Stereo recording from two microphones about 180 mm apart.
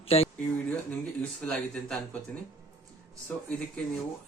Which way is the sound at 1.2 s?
5° left (ahead or behind).